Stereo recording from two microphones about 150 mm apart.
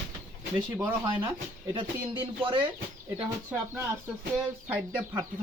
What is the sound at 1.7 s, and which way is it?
Speech, 35° right (ahead or behind).